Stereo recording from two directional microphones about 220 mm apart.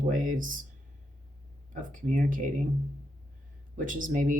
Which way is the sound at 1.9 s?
35° right (ahead or behind).